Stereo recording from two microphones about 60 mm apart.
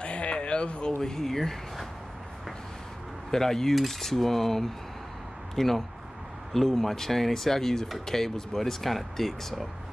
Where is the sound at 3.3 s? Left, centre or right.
Centre.